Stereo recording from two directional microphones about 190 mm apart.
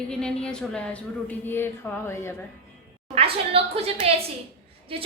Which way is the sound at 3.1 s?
30° right (ahead or behind).